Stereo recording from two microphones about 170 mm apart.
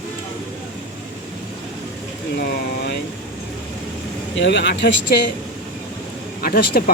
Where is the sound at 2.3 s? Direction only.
70° left (ahead or behind).